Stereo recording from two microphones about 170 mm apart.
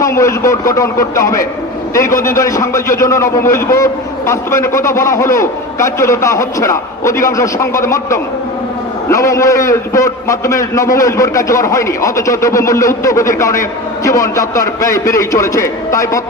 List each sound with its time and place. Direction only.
0.0 s a man's voice: 15° left (ahead or behind)